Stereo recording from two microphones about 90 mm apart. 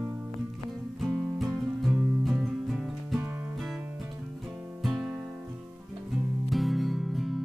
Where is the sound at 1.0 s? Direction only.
5° right (ahead or behind).